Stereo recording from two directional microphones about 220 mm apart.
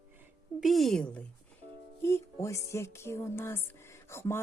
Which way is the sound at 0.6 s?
Centre (ahead or behind).